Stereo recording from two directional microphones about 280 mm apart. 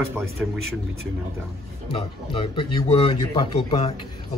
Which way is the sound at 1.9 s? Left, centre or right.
Centre.